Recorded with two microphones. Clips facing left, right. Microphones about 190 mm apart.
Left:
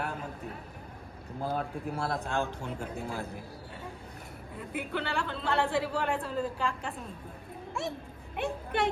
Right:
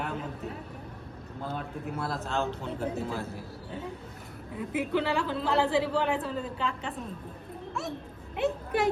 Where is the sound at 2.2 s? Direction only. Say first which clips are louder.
Right 1 dB; 15° left (ahead or behind).